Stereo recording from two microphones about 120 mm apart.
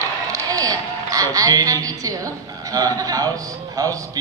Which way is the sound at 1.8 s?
30° right (ahead or behind).